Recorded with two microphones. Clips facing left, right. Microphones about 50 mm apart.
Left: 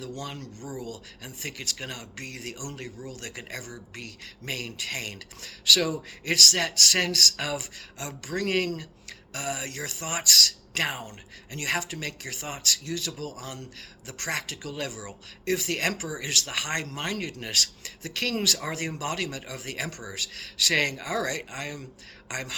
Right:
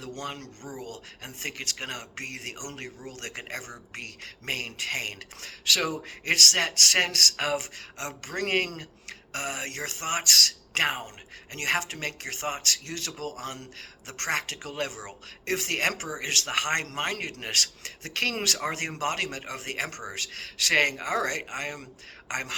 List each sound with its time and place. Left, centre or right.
0.2 s speech: right